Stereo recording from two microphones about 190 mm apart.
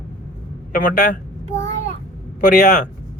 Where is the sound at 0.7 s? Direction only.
40° left (ahead or behind).